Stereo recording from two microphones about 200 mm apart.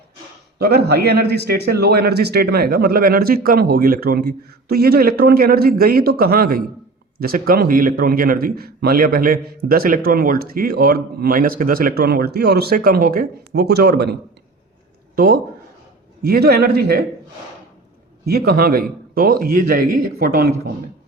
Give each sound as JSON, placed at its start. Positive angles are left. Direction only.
{"t": 0.6, "sound": "a man's voice", "side_deg": -55}
{"t": 18.3, "sound": "a man's voice", "side_deg": -50}